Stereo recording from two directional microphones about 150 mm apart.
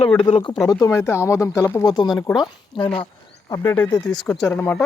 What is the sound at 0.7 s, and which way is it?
Speech, 20° left (ahead or behind).